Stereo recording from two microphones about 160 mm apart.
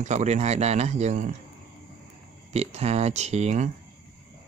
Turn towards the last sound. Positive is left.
turn(degrees=-45)  # may be behind; listen again after turning